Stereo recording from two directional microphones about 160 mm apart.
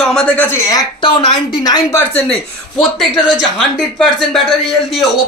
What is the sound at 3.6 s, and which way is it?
Speech, centre (ahead or behind).